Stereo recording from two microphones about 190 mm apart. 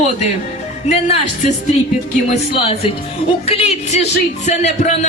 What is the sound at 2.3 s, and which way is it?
Speech, 30° left (ahead or behind).